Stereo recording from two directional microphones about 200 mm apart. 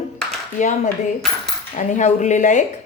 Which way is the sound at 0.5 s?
40° left (ahead or behind).